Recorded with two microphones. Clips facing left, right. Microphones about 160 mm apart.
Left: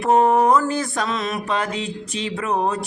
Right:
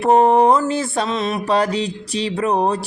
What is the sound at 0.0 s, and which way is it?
Mantra, 30° right (ahead or behind).